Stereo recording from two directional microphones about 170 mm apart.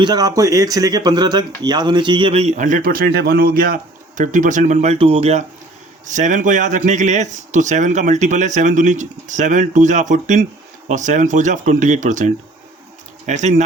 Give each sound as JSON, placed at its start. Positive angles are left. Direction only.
{"t": 0.0, "sound": "speech", "side_deg": -20}